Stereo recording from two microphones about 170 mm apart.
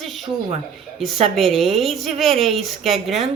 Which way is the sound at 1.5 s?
Centre (ahead or behind).